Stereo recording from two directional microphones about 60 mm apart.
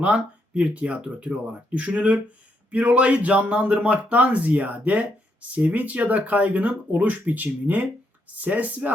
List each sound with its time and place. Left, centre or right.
0.0 s speech: right